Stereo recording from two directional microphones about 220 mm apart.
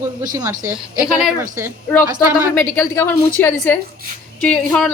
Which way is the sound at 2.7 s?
10° left (ahead or behind).